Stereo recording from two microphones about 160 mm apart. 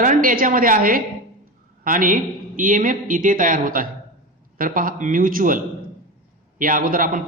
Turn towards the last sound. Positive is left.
turn(degrees=-60)  # may be behind; listen again after turning